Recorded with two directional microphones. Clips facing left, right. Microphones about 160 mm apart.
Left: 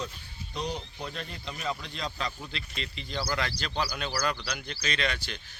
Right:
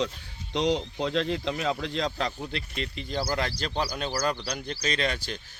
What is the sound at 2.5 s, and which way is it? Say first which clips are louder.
Speech: right 6 dB; 50° right (ahead or behind).